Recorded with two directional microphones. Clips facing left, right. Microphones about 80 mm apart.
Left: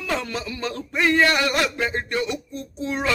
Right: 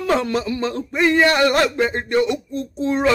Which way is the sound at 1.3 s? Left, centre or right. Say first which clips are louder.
Right 5 dB; right.